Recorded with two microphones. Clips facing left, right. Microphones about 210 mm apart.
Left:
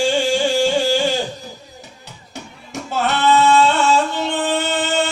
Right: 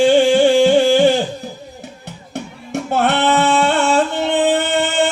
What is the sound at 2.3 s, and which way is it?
Singing, 60° right (ahead or behind).